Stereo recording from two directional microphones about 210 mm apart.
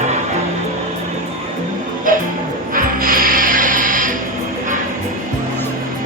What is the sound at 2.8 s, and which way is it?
Music, 45° right (ahead or behind).